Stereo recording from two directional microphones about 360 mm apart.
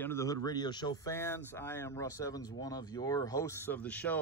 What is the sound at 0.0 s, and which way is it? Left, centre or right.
Speech, centre.